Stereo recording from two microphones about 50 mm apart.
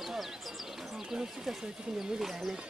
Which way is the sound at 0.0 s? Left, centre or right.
Centre.